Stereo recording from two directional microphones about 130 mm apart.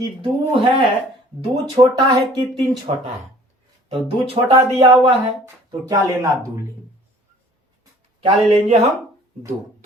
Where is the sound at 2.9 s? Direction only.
50° right (ahead or behind).